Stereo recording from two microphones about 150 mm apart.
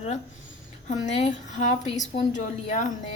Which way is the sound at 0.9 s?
55° left (ahead or behind).